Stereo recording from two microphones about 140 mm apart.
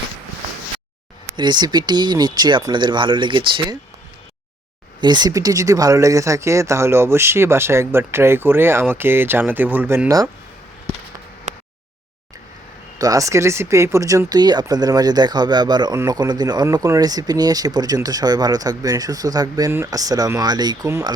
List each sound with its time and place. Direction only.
1.4 s speech: 30° right (ahead or behind)
4.9 s speech: 30° right (ahead or behind)
13.0 s speech: 25° right (ahead or behind)